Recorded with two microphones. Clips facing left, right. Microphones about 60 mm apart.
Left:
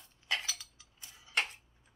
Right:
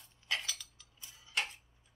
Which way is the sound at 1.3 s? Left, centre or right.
Left.